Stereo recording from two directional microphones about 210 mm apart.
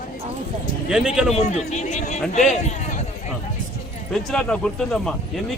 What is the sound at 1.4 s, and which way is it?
Speech, 30° left (ahead or behind).